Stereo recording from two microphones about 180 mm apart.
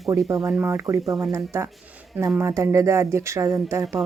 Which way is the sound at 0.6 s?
15° right (ahead or behind).